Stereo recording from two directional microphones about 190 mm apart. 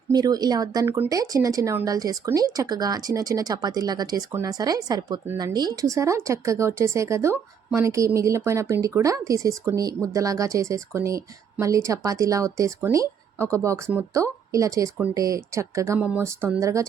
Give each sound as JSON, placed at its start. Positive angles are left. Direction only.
{"t": 0.1, "sound": "speech", "side_deg": -20}